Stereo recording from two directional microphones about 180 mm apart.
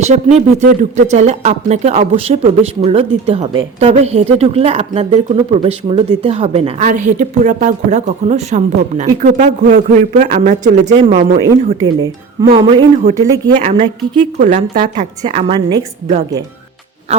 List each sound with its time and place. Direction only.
0.0 s speech: 40° right (ahead or behind)
10.9 s speech: 30° right (ahead or behind)
13.6 s speech: 40° right (ahead or behind)
17.1 s speech: 35° right (ahead or behind)